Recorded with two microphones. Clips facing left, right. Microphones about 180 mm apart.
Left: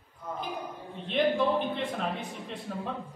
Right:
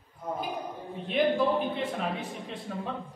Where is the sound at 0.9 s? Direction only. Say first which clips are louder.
Right 1 dB; centre (ahead or behind).